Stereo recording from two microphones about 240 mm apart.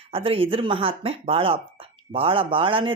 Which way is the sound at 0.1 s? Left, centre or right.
Right.